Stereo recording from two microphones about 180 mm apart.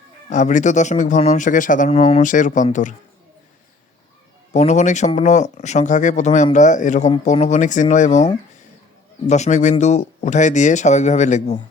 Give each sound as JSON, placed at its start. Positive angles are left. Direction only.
{"t": 0.3, "sound": "speech", "side_deg": 40}
{"t": 1.9, "sound": "speech", "side_deg": 35}
{"t": 2.3, "sound": "speech", "side_deg": 45}
{"t": 4.5, "sound": "speech", "side_deg": 40}